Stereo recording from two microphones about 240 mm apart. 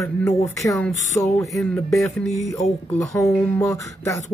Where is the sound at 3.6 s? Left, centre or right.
Centre.